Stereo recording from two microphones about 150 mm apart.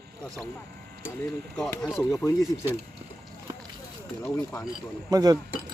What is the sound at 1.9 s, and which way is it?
Speech, 20° left (ahead or behind).